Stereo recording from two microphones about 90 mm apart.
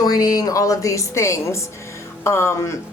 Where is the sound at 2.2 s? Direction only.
30° left (ahead or behind).